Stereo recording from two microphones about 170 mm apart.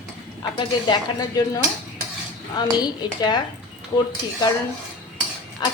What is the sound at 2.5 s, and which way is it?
Speech, 25° left (ahead or behind).